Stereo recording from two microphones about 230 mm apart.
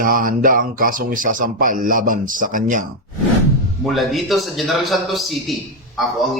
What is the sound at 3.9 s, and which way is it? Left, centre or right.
A man's voice, centre.